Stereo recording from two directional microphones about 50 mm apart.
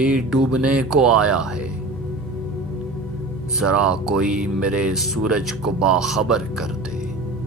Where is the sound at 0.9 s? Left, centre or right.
Centre.